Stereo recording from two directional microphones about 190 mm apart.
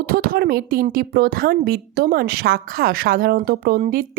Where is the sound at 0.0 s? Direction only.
50° right (ahead or behind).